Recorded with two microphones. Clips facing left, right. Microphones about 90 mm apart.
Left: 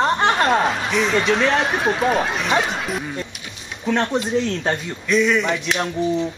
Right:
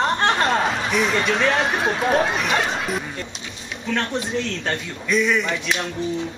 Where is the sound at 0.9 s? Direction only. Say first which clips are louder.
Left 2 dB; 5° right (ahead or behind).